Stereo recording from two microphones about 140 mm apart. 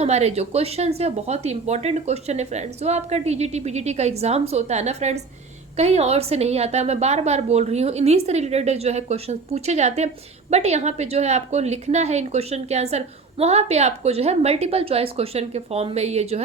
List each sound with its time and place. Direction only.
0.0 s speech: 50° right (ahead or behind)